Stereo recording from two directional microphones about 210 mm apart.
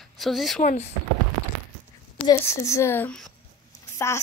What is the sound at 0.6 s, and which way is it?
Speech, 35° left (ahead or behind).